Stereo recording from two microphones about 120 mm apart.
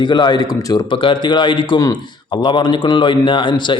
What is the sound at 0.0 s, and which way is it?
Speech, 40° left (ahead or behind).